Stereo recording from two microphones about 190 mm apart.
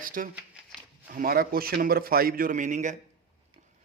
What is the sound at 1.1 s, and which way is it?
A man's voice, 50° right (ahead or behind).